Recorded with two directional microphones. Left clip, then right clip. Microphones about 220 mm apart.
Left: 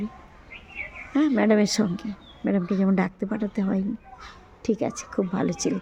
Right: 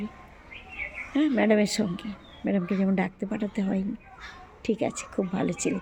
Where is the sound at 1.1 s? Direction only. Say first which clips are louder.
Left 2 dB; 15° left (ahead or behind).